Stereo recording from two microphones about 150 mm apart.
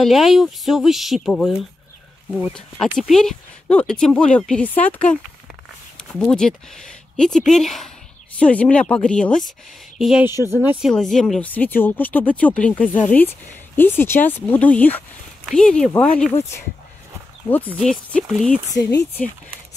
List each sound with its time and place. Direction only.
0.0 s speech: centre (ahead or behind)
3.0 s speech: centre (ahead or behind)
10.9 s speech: 5° left (ahead or behind)
17.5 s speech: 10° left (ahead or behind)
18.8 s speech: 25° left (ahead or behind)